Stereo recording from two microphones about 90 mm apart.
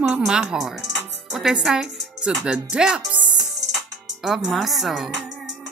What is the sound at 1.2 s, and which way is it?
Music, 5° right (ahead or behind).